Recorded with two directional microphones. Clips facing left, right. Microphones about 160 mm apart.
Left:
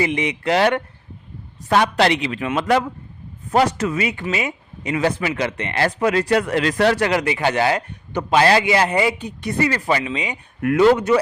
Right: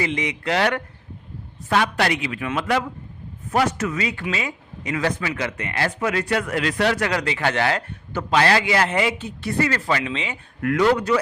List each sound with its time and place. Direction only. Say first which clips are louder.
0.0 s speech: left 4 dB; 20° left (ahead or behind)
7.1 s a man's voice: left 4 dB; 20° left (ahead or behind)